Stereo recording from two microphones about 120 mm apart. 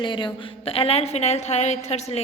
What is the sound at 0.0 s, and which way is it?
A woman's voice, 40° left (ahead or behind).